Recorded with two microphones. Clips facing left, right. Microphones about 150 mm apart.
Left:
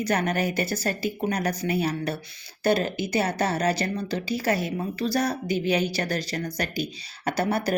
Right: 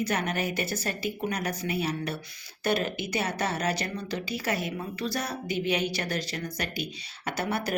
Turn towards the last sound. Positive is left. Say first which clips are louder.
# left 5 dB
turn(degrees=35)  # may be behind; listen again after turning